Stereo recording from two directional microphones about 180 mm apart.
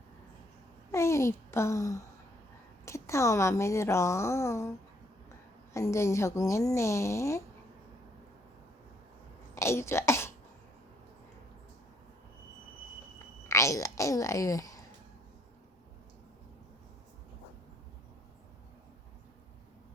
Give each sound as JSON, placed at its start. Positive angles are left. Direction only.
{"t": 0.9, "sound": "a woman's voice", "side_deg": 15}
{"t": 5.7, "sound": "a woman's voice", "side_deg": 15}
{"t": 9.6, "sound": "speech", "side_deg": 15}
{"t": 13.5, "sound": "speech", "side_deg": 15}